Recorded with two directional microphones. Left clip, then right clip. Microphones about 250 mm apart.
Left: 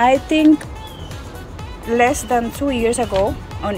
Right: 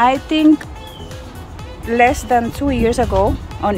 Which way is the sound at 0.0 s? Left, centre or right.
Centre.